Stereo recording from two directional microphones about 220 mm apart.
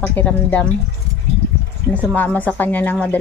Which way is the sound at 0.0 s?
10° left (ahead or behind).